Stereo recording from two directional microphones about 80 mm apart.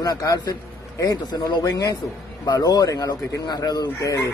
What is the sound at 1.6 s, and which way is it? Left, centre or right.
A man's voice, left.